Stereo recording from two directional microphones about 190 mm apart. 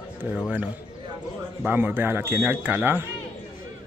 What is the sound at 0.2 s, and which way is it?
Speech, 10° right (ahead or behind).